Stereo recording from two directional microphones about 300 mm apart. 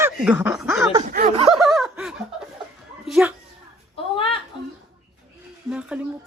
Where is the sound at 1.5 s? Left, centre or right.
Centre.